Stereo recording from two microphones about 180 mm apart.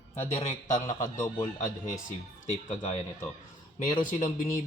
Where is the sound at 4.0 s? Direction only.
45° left (ahead or behind).